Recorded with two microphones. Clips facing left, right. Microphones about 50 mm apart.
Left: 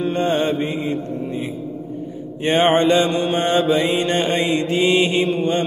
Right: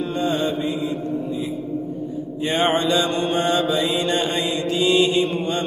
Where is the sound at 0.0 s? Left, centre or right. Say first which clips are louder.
Left 3 dB; left.